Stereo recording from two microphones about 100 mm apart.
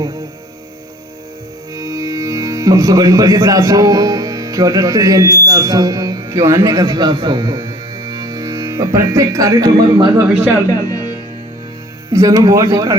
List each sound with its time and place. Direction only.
1.7 s speech: 35° right (ahead or behind)
6.2 s speech: 25° right (ahead or behind)
6.7 s speech: 40° right (ahead or behind)
10.7 s music: 40° left (ahead or behind)
12.1 s speech: 35° right (ahead or behind)